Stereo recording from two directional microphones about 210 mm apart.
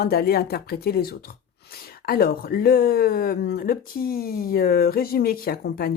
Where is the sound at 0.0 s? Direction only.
45° left (ahead or behind).